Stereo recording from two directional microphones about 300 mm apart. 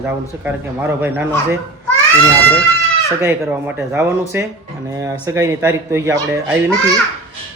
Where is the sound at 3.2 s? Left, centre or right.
Centre.